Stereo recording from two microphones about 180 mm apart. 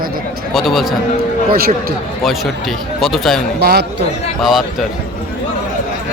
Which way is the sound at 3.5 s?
65° right (ahead or behind).